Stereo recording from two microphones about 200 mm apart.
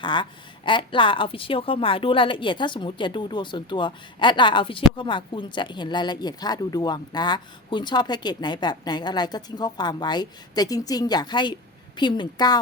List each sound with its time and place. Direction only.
0.0 s speech: 25° left (ahead or behind)